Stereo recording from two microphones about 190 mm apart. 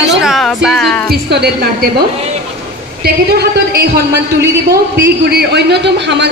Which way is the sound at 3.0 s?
55° right (ahead or behind).